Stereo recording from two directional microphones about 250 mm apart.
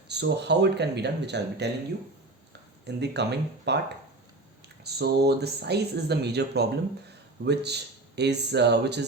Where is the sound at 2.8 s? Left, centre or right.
Right.